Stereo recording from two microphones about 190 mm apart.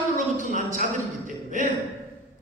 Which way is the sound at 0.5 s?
45° right (ahead or behind).